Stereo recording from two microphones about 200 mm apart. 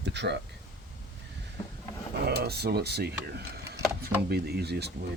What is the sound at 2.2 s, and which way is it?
Speech, 50° right (ahead or behind).